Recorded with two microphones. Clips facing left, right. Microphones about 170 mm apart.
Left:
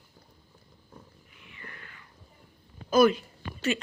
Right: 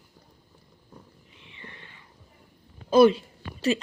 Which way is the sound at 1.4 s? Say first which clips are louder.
Right 1 dB; 25° right (ahead or behind).